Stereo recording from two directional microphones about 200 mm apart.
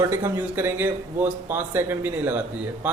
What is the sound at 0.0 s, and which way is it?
Speech, 10° right (ahead or behind).